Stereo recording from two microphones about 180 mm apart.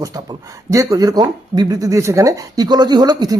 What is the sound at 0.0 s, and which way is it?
Speech, 20° right (ahead or behind).